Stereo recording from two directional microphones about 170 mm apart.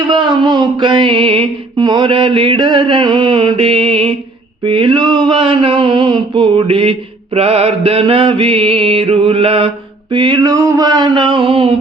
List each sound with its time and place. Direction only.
0.1 s music: 25° right (ahead or behind)
7.3 s mantra: 35° right (ahead or behind)
10.1 s music: 30° right (ahead or behind)